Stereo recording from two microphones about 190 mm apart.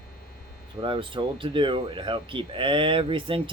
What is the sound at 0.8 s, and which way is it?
Speech, 25° right (ahead or behind).